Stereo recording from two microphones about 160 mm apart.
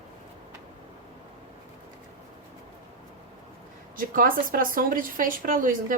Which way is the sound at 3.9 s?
60° right (ahead or behind).